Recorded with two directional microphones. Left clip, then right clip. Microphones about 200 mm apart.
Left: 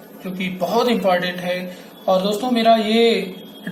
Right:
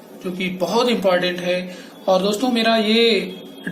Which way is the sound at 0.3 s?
15° right (ahead or behind).